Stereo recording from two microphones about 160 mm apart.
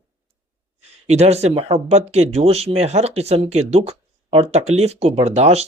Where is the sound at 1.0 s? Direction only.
45° right (ahead or behind).